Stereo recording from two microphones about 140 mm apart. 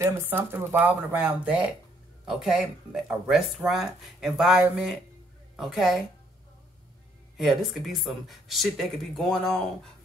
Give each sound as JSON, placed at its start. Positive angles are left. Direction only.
{"t": 0.0, "sound": "speech", "side_deg": -15}
{"t": 7.3, "sound": "speech", "side_deg": 0}